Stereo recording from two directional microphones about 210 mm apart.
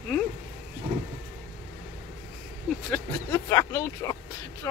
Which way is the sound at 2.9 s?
10° left (ahead or behind).